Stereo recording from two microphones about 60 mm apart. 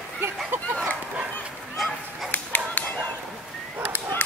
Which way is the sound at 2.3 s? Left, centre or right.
Left.